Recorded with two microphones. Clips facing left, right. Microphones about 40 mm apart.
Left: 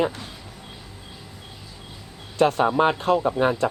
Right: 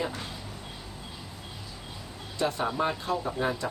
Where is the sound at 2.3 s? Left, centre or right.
Left.